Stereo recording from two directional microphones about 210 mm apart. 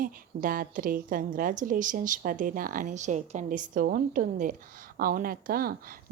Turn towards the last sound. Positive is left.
turn(degrees=-45)  # may be behind; listen again after turning